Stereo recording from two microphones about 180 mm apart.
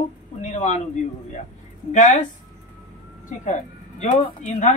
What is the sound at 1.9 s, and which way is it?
Speech, 40° left (ahead or behind).